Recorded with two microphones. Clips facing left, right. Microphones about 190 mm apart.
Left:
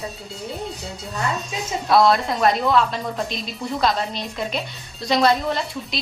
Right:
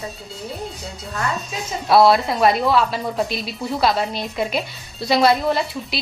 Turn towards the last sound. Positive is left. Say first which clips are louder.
# right 3 dB
turn(degrees=-5)  # may be behind; listen again after turning